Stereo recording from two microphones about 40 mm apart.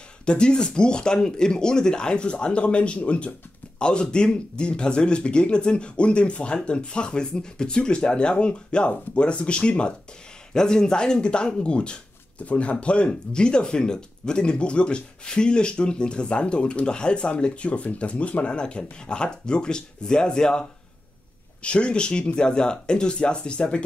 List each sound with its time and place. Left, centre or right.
0.2 s a man's voice: left
10.5 s a man's voice: centre
21.6 s a man's voice: left